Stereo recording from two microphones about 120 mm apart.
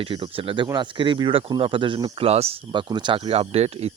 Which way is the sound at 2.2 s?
55° right (ahead or behind).